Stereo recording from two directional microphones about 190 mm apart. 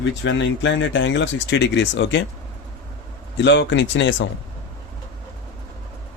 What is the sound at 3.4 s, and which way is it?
Speech, 70° left (ahead or behind).